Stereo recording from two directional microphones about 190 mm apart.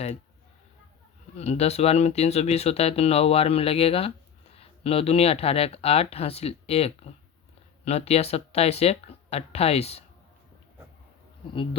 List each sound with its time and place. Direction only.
1.4 s speech: 35° left (ahead or behind)